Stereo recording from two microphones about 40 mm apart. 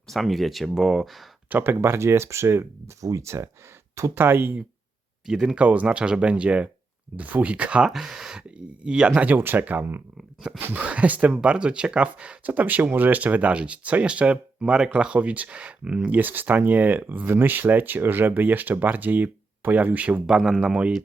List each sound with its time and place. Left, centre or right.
0.1 s speech: centre
1.8 s speech: right
4.1 s speech: right
5.2 s speech: centre
5.5 s speech: right
7.9 s speech: centre
9.4 s speech: right
11.4 s speech: right
12.5 s speech: right
13.5 s speech: right
14.9 s speech: right
20.2 s speech: centre